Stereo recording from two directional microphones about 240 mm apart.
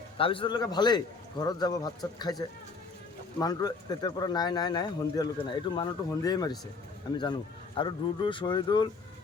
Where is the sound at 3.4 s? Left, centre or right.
Centre.